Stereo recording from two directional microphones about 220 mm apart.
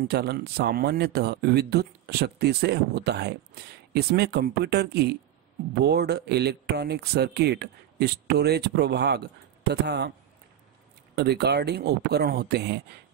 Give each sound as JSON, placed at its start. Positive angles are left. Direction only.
{"t": 0.1, "sound": "speech", "side_deg": -45}
{"t": 11.1, "sound": "speech", "side_deg": -45}